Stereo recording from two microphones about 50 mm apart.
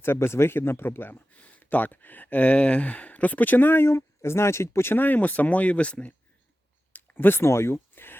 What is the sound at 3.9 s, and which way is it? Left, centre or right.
Speech, left.